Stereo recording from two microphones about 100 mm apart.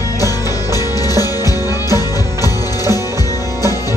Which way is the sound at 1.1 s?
40° left (ahead or behind).